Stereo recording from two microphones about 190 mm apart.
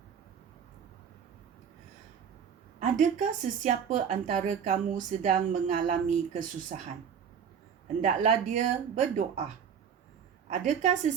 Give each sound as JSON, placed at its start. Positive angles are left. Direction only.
{"t": 2.8, "sound": "speech", "side_deg": -40}
{"t": 8.0, "sound": "speech", "side_deg": -40}
{"t": 10.5, "sound": "speech", "side_deg": -40}